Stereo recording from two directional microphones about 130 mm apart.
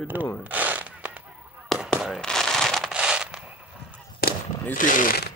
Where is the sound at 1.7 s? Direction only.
Centre (ahead or behind).